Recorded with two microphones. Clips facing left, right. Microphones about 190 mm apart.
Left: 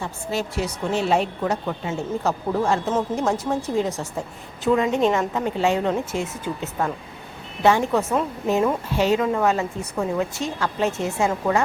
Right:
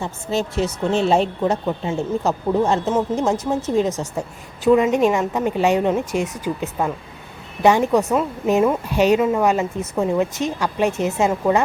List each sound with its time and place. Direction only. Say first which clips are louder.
0.0 s a woman's voice: right 4 dB; 25° right (ahead or behind)